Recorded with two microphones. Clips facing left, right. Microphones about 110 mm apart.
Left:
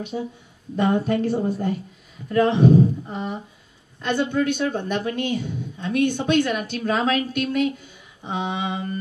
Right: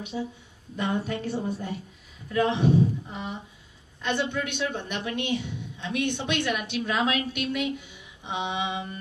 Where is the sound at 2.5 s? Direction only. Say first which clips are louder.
Left 6 dB; 40° left (ahead or behind).